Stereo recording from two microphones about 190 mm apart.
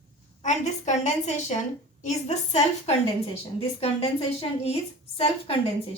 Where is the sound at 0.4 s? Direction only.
40° left (ahead or behind).